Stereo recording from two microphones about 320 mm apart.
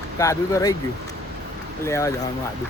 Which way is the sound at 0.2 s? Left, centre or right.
Centre.